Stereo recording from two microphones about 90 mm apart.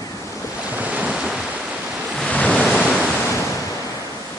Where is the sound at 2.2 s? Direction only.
10° left (ahead or behind).